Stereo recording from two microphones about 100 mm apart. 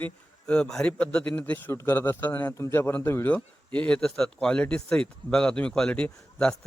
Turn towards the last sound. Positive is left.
turn(degrees=10)  # may be behind; listen again after turning